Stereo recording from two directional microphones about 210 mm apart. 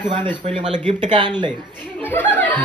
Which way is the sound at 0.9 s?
20° right (ahead or behind).